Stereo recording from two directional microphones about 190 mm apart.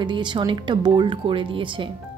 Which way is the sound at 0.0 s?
25° right (ahead or behind).